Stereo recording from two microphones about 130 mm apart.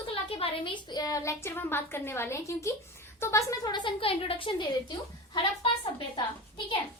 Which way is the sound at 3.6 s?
40° left (ahead or behind).